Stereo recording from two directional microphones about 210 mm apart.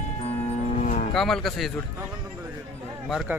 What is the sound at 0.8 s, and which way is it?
Cattle, 35° left (ahead or behind).